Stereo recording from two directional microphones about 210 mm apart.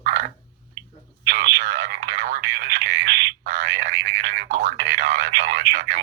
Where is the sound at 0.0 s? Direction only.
50° right (ahead or behind).